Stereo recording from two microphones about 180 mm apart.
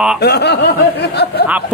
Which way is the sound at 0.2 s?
65° left (ahead or behind).